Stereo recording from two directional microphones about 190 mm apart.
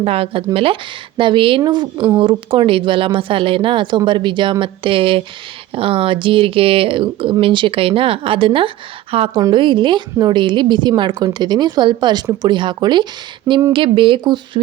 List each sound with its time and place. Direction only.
0.0 s a woman's voice: 30° right (ahead or behind)